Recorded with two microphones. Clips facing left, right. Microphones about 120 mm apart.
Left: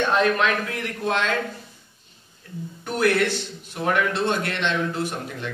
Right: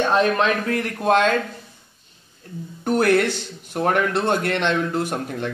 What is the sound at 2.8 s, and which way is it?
A man's voice, 45° right (ahead or behind).